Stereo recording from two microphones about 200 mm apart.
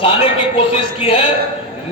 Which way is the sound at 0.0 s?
25° left (ahead or behind).